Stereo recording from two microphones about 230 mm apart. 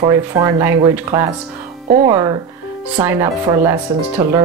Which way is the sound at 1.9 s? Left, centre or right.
Right.